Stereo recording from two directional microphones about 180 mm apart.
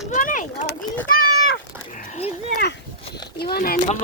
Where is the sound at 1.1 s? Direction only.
50° left (ahead or behind).